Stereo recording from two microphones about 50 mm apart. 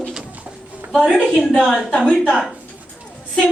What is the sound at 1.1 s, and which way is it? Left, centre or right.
Speech, centre.